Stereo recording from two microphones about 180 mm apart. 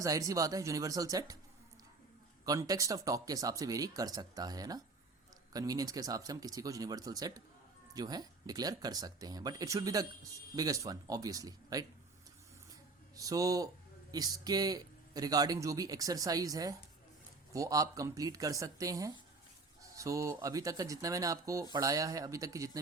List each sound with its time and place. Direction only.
0.0 s speech: 20° right (ahead or behind)
2.4 s speech: 20° right (ahead or behind)
13.1 s speech: 20° right (ahead or behind)